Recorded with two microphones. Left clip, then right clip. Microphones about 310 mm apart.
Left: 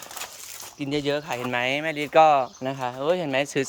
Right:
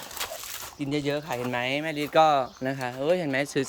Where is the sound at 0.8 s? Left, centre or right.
Centre.